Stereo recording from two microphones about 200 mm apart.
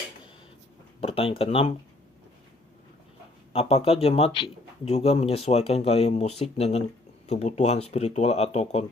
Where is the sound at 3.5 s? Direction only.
30° left (ahead or behind).